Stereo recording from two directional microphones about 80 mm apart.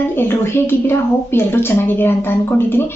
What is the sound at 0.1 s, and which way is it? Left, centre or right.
A woman's voice, left.